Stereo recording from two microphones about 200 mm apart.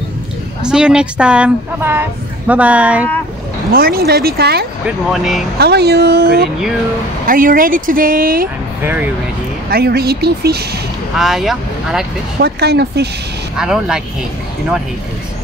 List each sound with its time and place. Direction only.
0.6 s speech: 5° right (ahead or behind)
3.7 s speech: 50° right (ahead or behind)
4.8 s speech: centre (ahead or behind)
5.6 s speech: 55° right (ahead or behind)
8.8 s speech: 10° right (ahead or behind)
9.7 s speech: 50° right (ahead or behind)
11.1 s speech: centre (ahead or behind)
12.4 s speech: 55° right (ahead or behind)
13.6 s speech: 5° right (ahead or behind)